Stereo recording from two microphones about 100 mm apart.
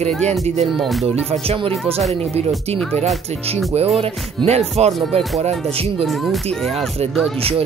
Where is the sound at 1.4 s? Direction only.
75° right (ahead or behind).